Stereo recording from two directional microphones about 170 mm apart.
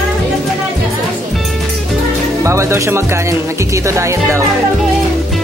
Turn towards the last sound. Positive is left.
turn(degrees=-15)  # may be behind; listen again after turning